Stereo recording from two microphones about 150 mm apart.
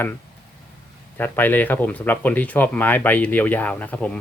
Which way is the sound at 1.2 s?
10° left (ahead or behind).